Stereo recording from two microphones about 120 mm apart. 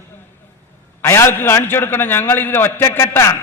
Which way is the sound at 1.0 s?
20° left (ahead or behind).